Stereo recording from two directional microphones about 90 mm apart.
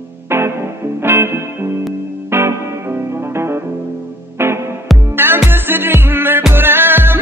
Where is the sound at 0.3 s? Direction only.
25° right (ahead or behind).